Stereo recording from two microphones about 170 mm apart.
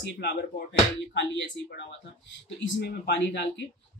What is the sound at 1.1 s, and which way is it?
Speech, 90° left.